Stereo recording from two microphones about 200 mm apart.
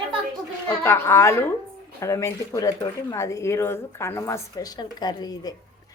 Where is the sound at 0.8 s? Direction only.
10° left (ahead or behind).